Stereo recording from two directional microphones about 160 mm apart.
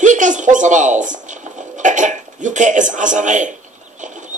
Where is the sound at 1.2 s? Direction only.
50° right (ahead or behind).